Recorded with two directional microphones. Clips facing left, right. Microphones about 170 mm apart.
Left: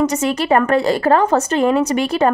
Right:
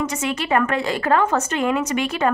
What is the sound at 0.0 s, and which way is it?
A woman's voice, 40° left (ahead or behind).